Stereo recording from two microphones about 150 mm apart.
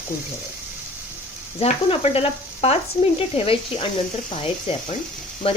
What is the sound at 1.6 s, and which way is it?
Speech, 40° left (ahead or behind).